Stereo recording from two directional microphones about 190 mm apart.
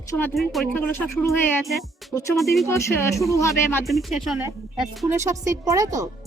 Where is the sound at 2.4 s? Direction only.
Centre (ahead or behind).